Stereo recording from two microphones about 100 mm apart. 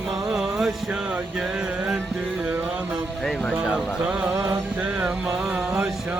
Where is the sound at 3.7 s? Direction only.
10° right (ahead or behind).